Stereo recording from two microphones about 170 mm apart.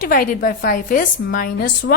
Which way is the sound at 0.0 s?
55° left (ahead or behind).